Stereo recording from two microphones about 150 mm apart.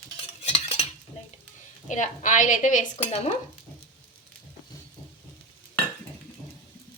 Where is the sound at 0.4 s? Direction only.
50° left (ahead or behind).